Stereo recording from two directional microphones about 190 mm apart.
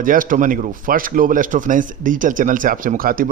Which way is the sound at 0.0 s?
45° right (ahead or behind).